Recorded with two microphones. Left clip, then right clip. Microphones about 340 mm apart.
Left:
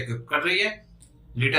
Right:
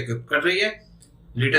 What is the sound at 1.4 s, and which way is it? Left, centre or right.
Speech, centre.